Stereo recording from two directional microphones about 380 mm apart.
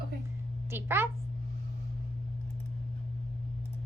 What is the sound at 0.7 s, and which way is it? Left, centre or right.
Speech, centre.